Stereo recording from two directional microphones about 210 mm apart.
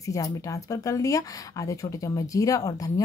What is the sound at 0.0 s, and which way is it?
Speech, 15° left (ahead or behind).